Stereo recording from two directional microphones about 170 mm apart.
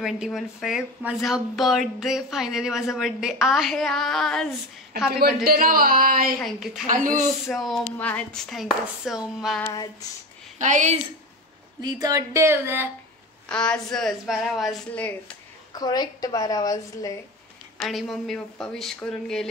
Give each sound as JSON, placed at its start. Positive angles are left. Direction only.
{"t": 0.0, "sound": "speech", "side_deg": 0}
{"t": 5.1, "sound": "a man's voice", "side_deg": -65}
{"t": 6.4, "sound": "speech", "side_deg": 0}
{"t": 6.9, "sound": "a woman's voice", "side_deg": -50}
{"t": 7.4, "sound": "speech", "side_deg": 0}
{"t": 9.6, "sound": "a sound", "side_deg": 15}
{"t": 10.6, "sound": "a woman's voice", "side_deg": -45}
{"t": 11.8, "sound": "speech", "side_deg": -20}
{"t": 13.5, "sound": "speech", "side_deg": 5}
{"t": 15.7, "sound": "a woman's voice", "side_deg": 25}
{"t": 17.8, "sound": "speech", "side_deg": 0}